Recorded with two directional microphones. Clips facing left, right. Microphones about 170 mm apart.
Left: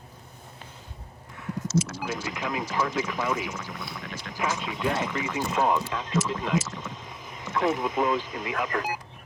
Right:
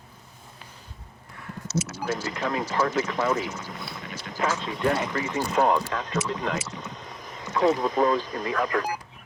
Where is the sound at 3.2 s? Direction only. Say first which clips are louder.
Right 3 dB; 25° right (ahead or behind).